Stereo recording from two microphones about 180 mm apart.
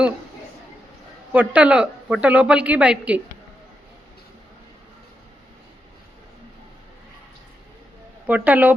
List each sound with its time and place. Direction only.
1.3 s a woman's voice: 5° right (ahead or behind)
8.3 s a woman's voice: 10° right (ahead or behind)